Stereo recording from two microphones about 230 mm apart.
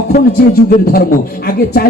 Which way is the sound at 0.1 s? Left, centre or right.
Left.